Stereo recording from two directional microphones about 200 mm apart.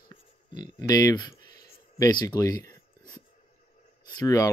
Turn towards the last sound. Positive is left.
turn(degrees=20)  # may be behind; listen again after turning